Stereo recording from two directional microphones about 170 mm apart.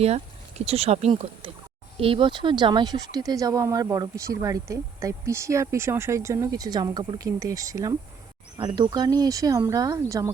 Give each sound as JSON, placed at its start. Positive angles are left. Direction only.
{"t": 0.6, "sound": "speech", "side_deg": -35}